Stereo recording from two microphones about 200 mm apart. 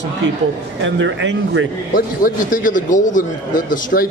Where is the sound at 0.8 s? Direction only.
70° right (ahead or behind).